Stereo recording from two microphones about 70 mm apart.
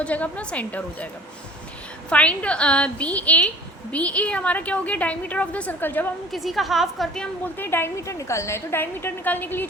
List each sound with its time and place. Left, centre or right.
0.0 s a woman's voice: centre
2.0 s a woman's voice: centre
6.3 s a woman's voice: centre
7.4 s a woman's voice: left
8.0 s a woman's voice: left